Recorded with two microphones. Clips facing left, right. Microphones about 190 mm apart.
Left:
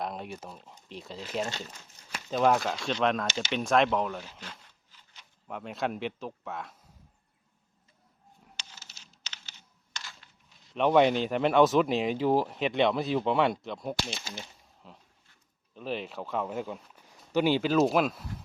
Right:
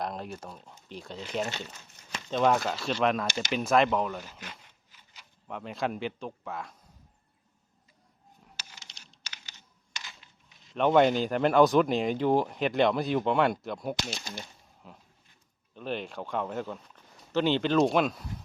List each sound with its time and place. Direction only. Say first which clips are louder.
0.0 s speech: right 1 dB; centre (ahead or behind)
4.3 s a sound: right 1 dB; 10° right (ahead or behind)
5.5 s speech: even; centre (ahead or behind)
8.8 s computer keyboard: right 1 dB; 5° left (ahead or behind)
9.2 s computer keyboard: even; 10° right (ahead or behind)
10.8 s speech: even; centre (ahead or behind)